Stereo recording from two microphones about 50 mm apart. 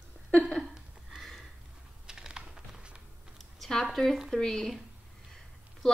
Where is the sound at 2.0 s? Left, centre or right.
Centre.